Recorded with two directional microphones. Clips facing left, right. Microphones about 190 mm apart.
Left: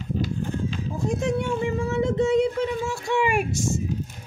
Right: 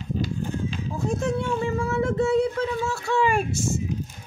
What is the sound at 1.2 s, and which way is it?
Speech, 20° left (ahead or behind).